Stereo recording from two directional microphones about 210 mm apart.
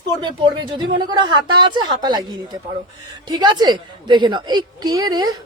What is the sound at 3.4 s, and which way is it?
A woman's voice, 20° right (ahead or behind).